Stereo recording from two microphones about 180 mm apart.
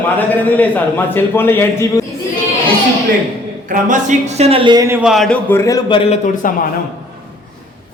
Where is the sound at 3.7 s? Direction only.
45° right (ahead or behind); by 5.0 s 20° right (ahead or behind).